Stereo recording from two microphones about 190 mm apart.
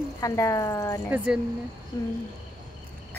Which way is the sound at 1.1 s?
5° right (ahead or behind).